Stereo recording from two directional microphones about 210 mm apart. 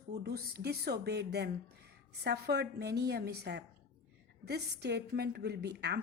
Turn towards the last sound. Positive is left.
turn(degrees=-50)  # may be behind; listen again after turning